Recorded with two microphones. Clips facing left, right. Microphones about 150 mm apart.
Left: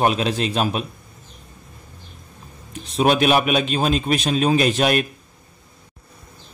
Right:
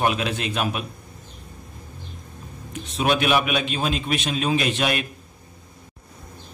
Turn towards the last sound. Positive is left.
turn(degrees=40)  # may be behind; listen again after turning